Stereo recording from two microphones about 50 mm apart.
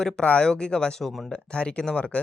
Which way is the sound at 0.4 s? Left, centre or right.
Centre.